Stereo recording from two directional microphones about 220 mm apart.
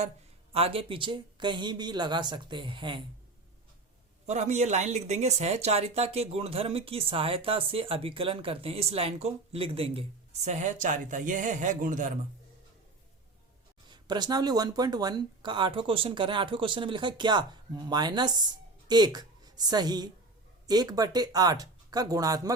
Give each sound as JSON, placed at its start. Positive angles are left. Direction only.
{"t": 0.5, "sound": "speech", "side_deg": -25}
{"t": 4.3, "sound": "speech", "side_deg": -30}
{"t": 13.9, "sound": "speech", "side_deg": -20}